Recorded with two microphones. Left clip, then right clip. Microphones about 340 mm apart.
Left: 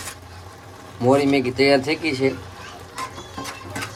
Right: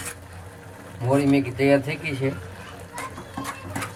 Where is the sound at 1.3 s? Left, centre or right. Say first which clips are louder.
Left 3 dB; centre.